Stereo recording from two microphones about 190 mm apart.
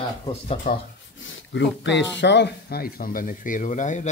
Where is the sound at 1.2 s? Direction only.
70° left (ahead or behind).